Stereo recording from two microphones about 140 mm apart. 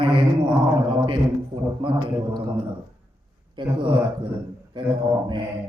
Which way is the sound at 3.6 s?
35° right (ahead or behind).